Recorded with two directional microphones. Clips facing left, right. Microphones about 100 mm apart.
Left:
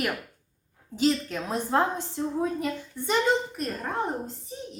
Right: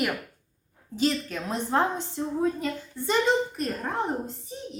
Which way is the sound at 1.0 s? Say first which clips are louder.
Left 2 dB; 15° left (ahead or behind).